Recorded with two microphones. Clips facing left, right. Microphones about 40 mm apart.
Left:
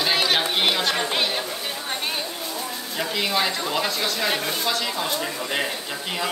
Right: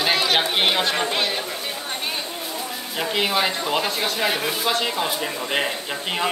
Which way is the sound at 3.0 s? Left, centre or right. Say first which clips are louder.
Right 2 dB; right.